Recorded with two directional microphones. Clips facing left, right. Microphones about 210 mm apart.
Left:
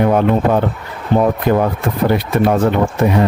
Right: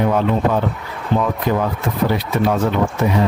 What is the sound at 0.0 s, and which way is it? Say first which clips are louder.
Speech: left 4 dB; 55° left (ahead or behind).